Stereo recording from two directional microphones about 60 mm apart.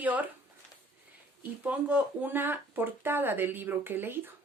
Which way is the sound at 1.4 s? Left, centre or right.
Right.